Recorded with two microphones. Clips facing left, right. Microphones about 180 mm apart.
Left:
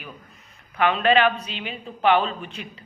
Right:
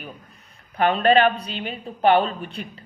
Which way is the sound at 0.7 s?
40° right (ahead or behind).